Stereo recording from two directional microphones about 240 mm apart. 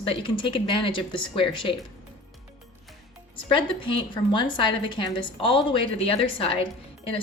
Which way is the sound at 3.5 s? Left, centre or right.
Left.